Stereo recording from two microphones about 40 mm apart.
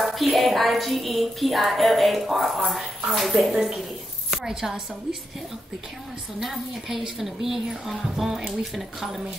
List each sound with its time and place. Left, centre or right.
0.0 s music: centre
4.5 s a woman's voice: centre
6.4 s a woman's voice: centre
8.5 s music: centre